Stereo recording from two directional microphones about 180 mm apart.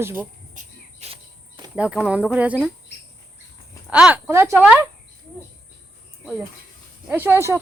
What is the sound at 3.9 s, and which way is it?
Speech, 5° right (ahead or behind).